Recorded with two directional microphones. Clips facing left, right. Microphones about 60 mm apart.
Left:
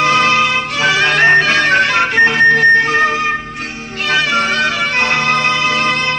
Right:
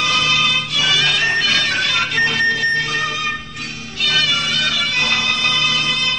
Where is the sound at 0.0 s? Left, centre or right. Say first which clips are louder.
Left 6 dB; left.